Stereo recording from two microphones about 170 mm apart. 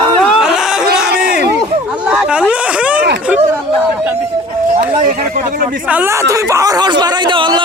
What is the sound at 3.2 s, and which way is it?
Speech, 10° right (ahead or behind).